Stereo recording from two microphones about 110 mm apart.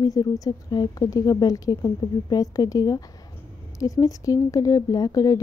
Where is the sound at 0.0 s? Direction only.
35° left (ahead or behind).